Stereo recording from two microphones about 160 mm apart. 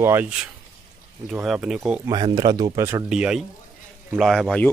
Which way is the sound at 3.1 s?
5° right (ahead or behind).